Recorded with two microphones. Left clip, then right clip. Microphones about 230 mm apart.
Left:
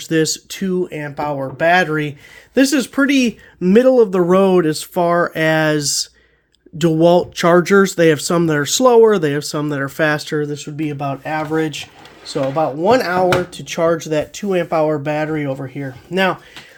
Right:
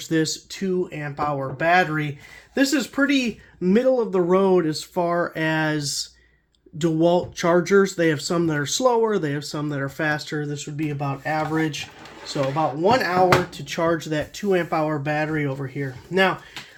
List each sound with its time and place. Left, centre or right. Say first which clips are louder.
0.0 s speech: left 6 dB; left